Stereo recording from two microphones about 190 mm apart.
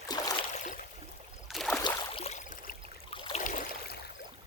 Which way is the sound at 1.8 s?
30° left (ahead or behind).